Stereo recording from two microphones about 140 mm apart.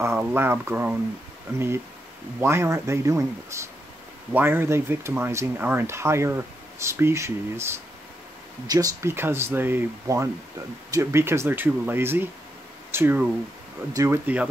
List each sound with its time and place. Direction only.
0.0 s speech: 15° right (ahead or behind)
2.4 s speech: 20° right (ahead or behind)